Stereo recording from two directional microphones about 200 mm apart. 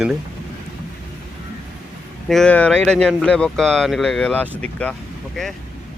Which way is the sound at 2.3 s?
5° left (ahead or behind).